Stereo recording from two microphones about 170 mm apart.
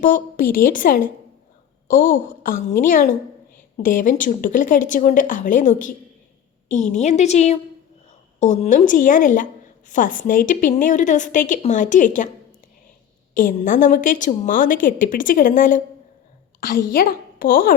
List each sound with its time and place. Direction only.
0.0 s a woman's voice: 55° left (ahead or behind)
6.9 s a woman's voice: 40° left (ahead or behind)
13.3 s a woman's voice: 50° left (ahead or behind)